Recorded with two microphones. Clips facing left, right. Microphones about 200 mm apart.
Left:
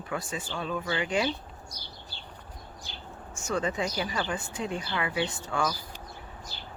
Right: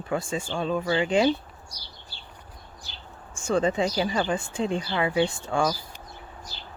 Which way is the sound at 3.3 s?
30° right (ahead or behind).